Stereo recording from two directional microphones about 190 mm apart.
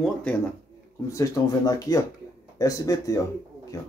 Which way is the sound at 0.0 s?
5° left (ahead or behind).